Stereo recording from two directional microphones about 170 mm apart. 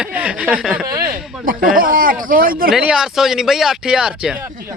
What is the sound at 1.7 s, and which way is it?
Speech, 55° right (ahead or behind).